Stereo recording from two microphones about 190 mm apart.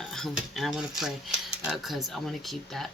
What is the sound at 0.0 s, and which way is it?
Speech, centre (ahead or behind).